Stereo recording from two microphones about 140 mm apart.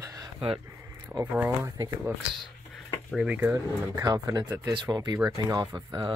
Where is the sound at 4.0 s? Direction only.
25° right (ahead or behind).